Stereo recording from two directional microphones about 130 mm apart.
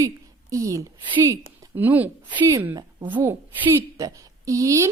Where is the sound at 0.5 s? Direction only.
25° right (ahead or behind).